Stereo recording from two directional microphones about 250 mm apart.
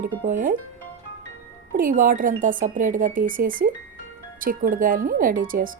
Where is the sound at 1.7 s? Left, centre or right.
Right.